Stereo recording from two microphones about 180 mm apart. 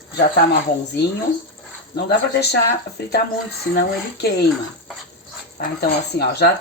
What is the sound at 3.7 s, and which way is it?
Speech, 65° left (ahead or behind).